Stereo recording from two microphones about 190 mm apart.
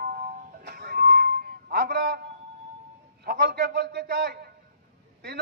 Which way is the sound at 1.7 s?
60° right (ahead or behind).